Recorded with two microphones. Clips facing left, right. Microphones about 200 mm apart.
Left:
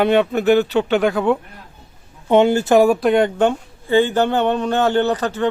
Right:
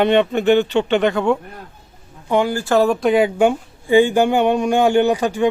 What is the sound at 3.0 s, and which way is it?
Speech, centre (ahead or behind).